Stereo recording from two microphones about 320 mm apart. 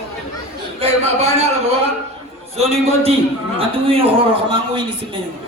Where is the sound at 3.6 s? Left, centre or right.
Centre.